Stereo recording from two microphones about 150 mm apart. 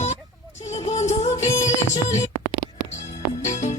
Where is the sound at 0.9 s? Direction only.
45° left (ahead or behind).